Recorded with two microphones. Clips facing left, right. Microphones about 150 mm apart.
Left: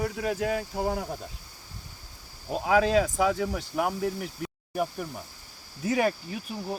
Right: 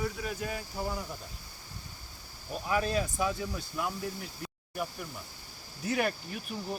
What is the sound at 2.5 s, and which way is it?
Speech, 90° left.